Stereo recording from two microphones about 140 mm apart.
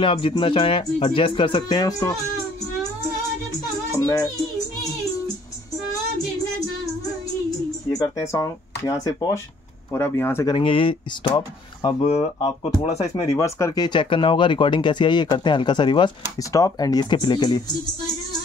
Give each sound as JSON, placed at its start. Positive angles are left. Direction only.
{"t": 0.0, "sound": "speech", "side_deg": 40}
{"t": 4.0, "sound": "a child's voice", "side_deg": 25}
{"t": 7.9, "sound": "speech", "side_deg": 25}
{"t": 10.4, "sound": "speech", "side_deg": 35}
{"t": 12.0, "sound": "speech", "side_deg": 50}
{"t": 13.1, "sound": "speech", "side_deg": 25}